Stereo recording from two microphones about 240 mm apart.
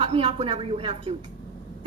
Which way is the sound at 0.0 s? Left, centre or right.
Right.